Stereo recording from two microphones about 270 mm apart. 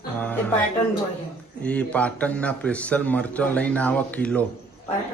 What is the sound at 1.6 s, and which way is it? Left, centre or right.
Speech, centre.